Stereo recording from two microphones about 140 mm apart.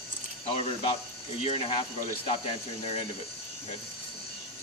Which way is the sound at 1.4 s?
45° left (ahead or behind).